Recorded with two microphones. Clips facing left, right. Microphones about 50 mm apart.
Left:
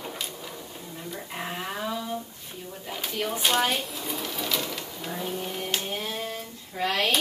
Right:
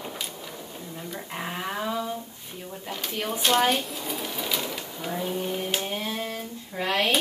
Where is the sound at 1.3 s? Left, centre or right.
Centre.